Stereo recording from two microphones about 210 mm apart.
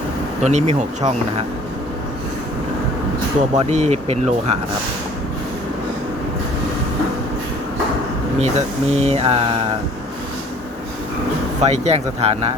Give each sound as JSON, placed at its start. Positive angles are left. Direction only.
{"t": 0.4, "sound": "speech", "side_deg": -35}
{"t": 3.7, "sound": "speech", "side_deg": -35}
{"t": 8.4, "sound": "speech", "side_deg": -30}
{"t": 11.6, "sound": "speech", "side_deg": -30}